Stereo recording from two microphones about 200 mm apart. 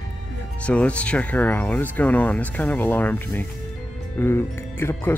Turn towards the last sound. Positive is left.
turn(degrees=10)  # may be behind; listen again after turning